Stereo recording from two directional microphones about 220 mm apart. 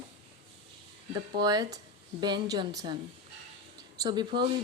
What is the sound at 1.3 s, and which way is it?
Speech, 20° right (ahead or behind).